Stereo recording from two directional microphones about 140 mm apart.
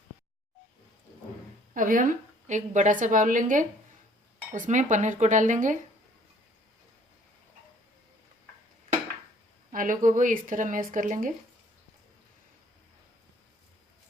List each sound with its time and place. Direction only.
1.7 s a woman's voice: 70° right (ahead or behind)
9.7 s a woman's voice: 75° right (ahead or behind)